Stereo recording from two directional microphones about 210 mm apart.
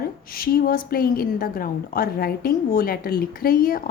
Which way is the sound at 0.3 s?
45° left (ahead or behind).